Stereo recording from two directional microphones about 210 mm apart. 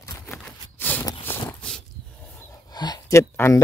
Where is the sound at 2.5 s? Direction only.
20° left (ahead or behind).